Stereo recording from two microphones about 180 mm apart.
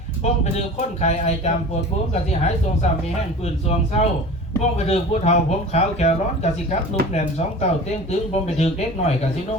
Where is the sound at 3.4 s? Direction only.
35° left (ahead or behind).